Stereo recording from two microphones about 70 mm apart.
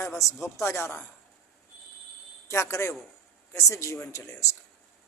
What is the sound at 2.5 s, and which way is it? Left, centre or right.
Speech, left.